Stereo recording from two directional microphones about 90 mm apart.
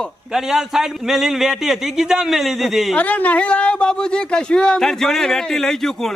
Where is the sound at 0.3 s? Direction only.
5° right (ahead or behind).